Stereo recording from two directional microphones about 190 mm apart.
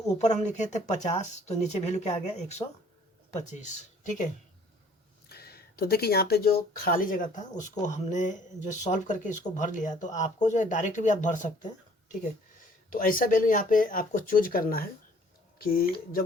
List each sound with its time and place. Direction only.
0.1 s speech: 35° left (ahead or behind)
5.3 s a sound: 55° left (ahead or behind)
6.7 s speech: 45° left (ahead or behind)
12.9 s speech: 45° left (ahead or behind)